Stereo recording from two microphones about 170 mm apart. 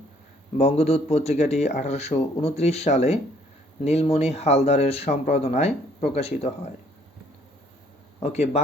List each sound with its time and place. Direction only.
0.5 s speech: 35° left (ahead or behind)
8.2 s speech: 40° left (ahead or behind)